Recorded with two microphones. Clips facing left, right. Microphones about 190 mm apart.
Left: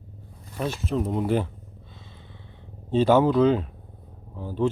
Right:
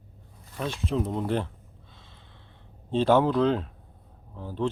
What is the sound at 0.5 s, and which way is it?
Speech, 5° left (ahead or behind).